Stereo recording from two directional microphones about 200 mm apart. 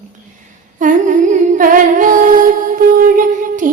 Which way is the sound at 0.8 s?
40° right (ahead or behind).